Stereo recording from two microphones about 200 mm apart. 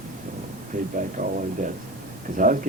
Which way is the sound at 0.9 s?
40° right (ahead or behind).